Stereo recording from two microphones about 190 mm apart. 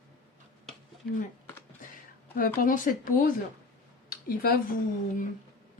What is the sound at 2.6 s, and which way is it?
A woman's voice, 45° left (ahead or behind).